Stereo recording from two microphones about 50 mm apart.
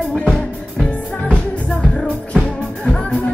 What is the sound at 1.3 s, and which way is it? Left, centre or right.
Music, centre.